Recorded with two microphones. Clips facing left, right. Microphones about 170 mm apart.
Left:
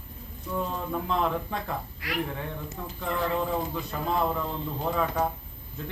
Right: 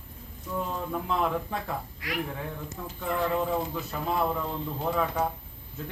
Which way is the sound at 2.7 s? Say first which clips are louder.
Right 1 dB; 5° right (ahead or behind).